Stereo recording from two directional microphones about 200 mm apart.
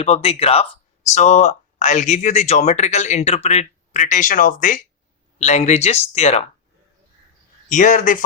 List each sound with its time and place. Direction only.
0.0 s speech: 30° left (ahead or behind)
7.7 s speech: 40° left (ahead or behind)